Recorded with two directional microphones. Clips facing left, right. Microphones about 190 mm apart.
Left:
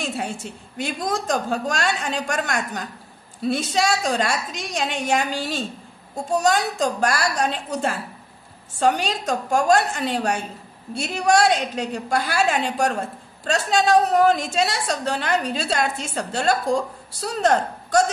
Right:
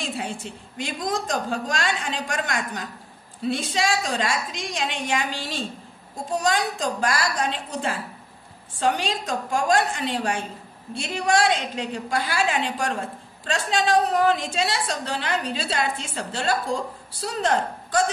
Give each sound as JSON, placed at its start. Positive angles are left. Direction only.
{"t": 0.2, "sound": "a woman's voice", "side_deg": 45}